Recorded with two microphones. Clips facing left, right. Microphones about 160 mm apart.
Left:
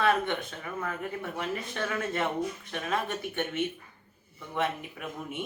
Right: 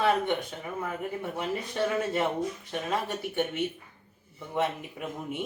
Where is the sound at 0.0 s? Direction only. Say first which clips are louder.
Right 1 dB; 15° right (ahead or behind).